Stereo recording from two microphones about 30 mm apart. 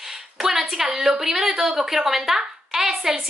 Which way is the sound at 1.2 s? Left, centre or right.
Centre.